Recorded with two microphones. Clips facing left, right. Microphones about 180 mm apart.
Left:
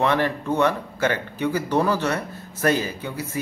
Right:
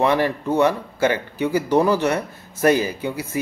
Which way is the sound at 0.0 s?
10° right (ahead or behind).